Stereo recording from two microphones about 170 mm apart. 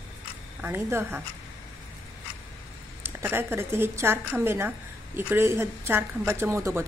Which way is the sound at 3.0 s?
15° right (ahead or behind).